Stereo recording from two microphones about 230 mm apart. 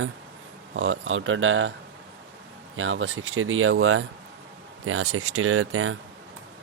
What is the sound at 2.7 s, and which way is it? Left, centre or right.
Speech, right.